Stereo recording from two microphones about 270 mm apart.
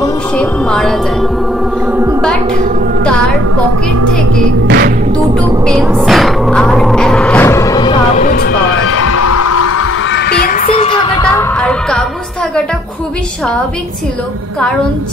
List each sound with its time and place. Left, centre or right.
0.4 s a woman's voice: centre
4.6 s music: right
5.4 s music: centre
8.2 s speech: left
8.7 s music: left
10.1 s music: left; by 11.4 s centre